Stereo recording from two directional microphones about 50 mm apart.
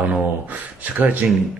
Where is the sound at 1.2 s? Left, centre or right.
Right.